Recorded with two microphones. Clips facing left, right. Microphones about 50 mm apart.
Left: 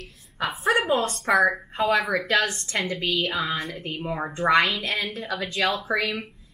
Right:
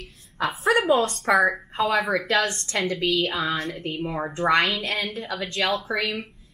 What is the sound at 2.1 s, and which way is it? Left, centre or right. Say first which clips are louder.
A woman's voice: even; left.